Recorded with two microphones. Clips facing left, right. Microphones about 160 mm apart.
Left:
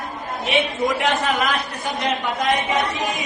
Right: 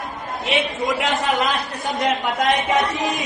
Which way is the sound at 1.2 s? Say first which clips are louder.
Right 1 dB; 20° right (ahead or behind).